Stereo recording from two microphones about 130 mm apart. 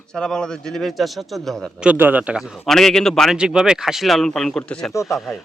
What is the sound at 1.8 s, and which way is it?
Speech, 15° right (ahead or behind).